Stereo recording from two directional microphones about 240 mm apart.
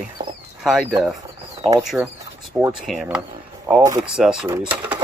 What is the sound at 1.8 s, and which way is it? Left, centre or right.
Speech, centre.